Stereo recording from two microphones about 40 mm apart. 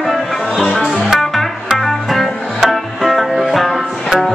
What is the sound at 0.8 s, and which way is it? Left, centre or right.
Music, centre.